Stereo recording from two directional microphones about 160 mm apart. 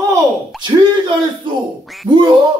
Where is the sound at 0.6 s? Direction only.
30° right (ahead or behind).